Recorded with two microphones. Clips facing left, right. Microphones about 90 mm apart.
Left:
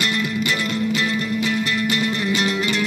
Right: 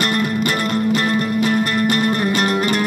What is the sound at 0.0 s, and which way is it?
Music, 45° right (ahead or behind).